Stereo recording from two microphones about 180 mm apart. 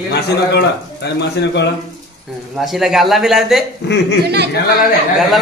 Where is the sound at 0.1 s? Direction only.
65° left (ahead or behind).